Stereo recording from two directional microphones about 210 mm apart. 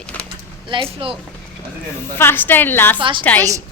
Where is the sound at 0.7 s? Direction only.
25° right (ahead or behind).